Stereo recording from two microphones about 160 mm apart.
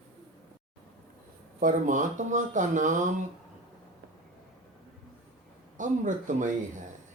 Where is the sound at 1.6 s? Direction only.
55° right (ahead or behind).